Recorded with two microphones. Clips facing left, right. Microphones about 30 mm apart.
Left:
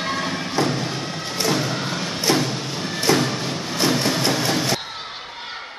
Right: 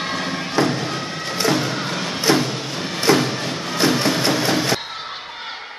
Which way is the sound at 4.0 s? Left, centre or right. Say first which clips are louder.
Right 2 dB; right.